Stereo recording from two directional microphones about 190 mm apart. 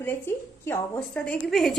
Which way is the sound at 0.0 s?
15° left (ahead or behind).